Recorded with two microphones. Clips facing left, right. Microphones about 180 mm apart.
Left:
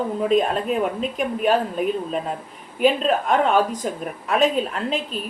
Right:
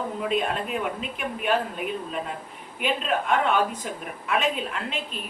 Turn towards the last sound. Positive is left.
turn(degrees=40)  # may be behind; listen again after turning